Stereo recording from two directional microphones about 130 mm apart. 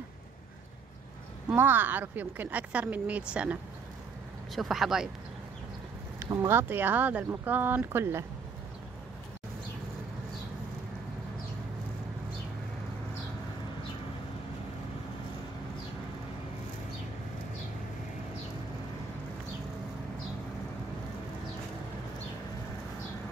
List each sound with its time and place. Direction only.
1.5 s speech: 15° right (ahead or behind)
4.6 s speech: centre (ahead or behind)
6.1 s speech: 20° right (ahead or behind)